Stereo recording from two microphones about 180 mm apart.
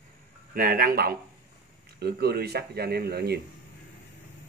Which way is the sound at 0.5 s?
50° right (ahead or behind).